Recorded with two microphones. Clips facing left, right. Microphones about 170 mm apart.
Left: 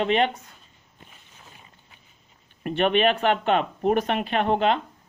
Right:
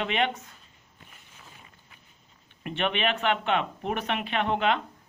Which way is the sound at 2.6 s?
40° left (ahead or behind).